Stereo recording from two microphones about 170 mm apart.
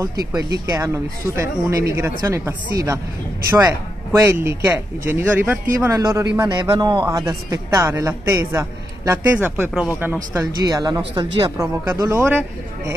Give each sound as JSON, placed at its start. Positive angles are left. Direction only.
{"t": 0.3, "sound": "a man's voice", "side_deg": -20}
{"t": 10.3, "sound": "a man's voice", "side_deg": -20}